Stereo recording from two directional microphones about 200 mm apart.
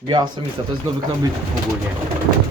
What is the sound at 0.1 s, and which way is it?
Speech, 20° right (ahead or behind).